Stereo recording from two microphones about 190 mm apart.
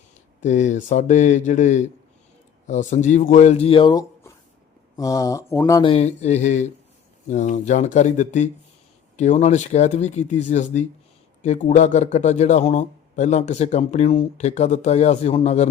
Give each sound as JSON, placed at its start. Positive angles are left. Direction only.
{"t": 0.4, "sound": "a man's voice", "side_deg": 40}
{"t": 5.8, "sound": "a man's voice", "side_deg": 30}